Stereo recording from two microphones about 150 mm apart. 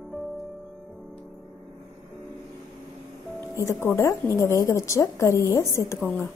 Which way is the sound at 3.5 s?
20° left (ahead or behind).